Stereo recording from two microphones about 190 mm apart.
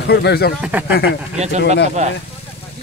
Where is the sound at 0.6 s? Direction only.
5° right (ahead or behind).